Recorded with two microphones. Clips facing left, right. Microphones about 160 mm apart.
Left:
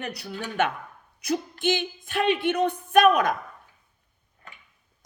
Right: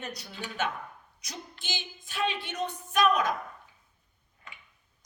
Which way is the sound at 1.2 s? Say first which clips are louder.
Left 18 dB; 55° left (ahead or behind).